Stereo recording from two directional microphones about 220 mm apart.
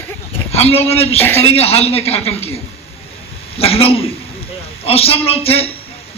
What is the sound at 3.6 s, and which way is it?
A man's voice, 25° left (ahead or behind).